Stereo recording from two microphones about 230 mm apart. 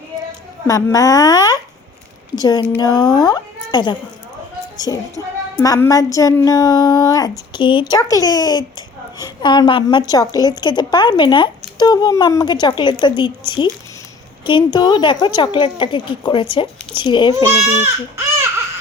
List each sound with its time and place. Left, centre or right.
0.7 s a woman's voice: centre